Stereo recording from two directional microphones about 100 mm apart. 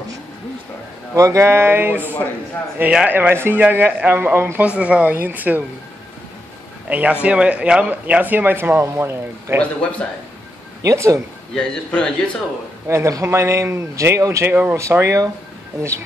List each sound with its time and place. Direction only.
1.1 s speech: 30° right (ahead or behind)
6.9 s speech: 15° right (ahead or behind)
9.6 s speech: 15° left (ahead or behind)
10.8 s speech: 30° right (ahead or behind)
11.5 s speech: 10° left (ahead or behind)
12.8 s speech: 30° right (ahead or behind)
14.5 s speech: 15° right (ahead or behind)
14.8 s speech: 30° right (ahead or behind)